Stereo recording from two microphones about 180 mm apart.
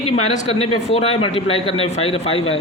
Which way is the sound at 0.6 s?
35° left (ahead or behind).